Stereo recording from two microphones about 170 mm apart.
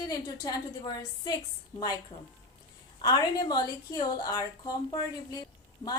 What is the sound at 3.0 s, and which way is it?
A woman's voice, 25° left (ahead or behind).